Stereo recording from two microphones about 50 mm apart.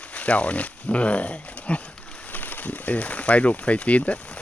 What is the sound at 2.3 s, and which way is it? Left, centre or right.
Speech, left.